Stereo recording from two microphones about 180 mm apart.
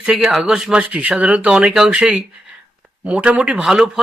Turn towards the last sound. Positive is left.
turn(degrees=-5)  # may be behind; listen again after turning